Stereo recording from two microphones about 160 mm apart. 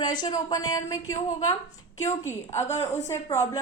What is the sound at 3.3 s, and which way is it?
Speech, 20° left (ahead or behind).